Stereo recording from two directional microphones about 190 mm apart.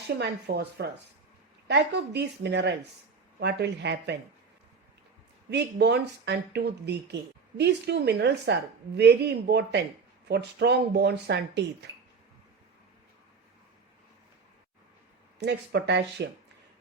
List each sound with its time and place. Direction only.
0.2 s speech: 60° right (ahead or behind)
5.5 s speech: 65° right (ahead or behind)
15.4 s speech: 65° right (ahead or behind)